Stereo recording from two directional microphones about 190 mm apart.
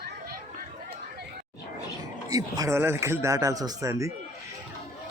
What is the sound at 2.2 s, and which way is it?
Speech, 20° right (ahead or behind).